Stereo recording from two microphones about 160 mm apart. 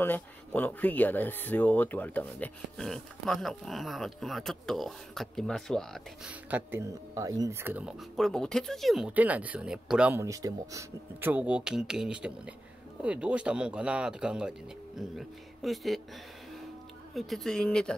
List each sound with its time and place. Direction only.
0.0 s speech: 10° left (ahead or behind)
6.2 s speech: 10° right (ahead or behind)
8.2 s speech: 5° left (ahead or behind)
10.2 s speech: 20° right (ahead or behind); by 16.0 s centre (ahead or behind)
17.1 s speech: centre (ahead or behind)